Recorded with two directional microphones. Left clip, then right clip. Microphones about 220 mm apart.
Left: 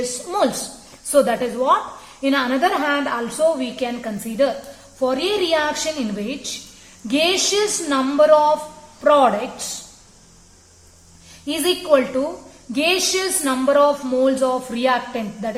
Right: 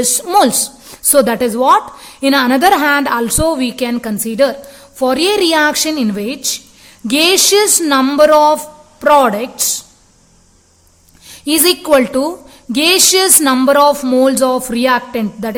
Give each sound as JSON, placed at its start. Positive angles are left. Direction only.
{"t": 0.3, "sound": "speech", "side_deg": -50}
{"t": 11.4, "sound": "speech", "side_deg": -50}